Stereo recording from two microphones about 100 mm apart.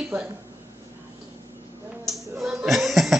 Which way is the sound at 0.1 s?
25° right (ahead or behind).